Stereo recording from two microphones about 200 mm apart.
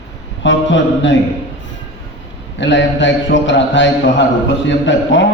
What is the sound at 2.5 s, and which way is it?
A man's voice, 65° left (ahead or behind).